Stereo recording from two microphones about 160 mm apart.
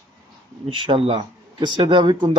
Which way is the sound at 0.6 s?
35° right (ahead or behind).